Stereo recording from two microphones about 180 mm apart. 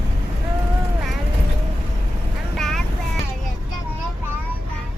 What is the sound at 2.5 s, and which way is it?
Child singing, centre (ahead or behind).